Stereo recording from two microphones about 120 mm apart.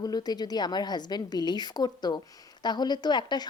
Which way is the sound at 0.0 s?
35° left (ahead or behind).